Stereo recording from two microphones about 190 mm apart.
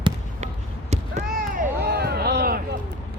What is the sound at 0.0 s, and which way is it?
Basketball bounce, 35° right (ahead or behind).